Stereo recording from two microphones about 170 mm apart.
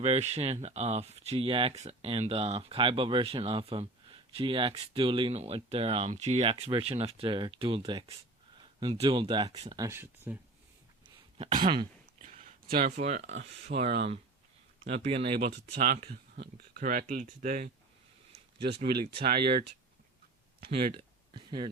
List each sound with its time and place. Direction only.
0.0 s speech: 40° right (ahead or behind); by 10.3 s 15° right (ahead or behind)
11.3 s speech: 40° right (ahead or behind)
11.6 s speech: 30° right (ahead or behind)
12.2 s a sound: 45° right (ahead or behind)
12.6 s speech: 60° right (ahead or behind)
13.0 s speech: 40° right (ahead or behind)
15.8 s speech: 50° right (ahead or behind)
19.2 s speech: 60° right (ahead or behind)
21.3 s speech: 25° right (ahead or behind)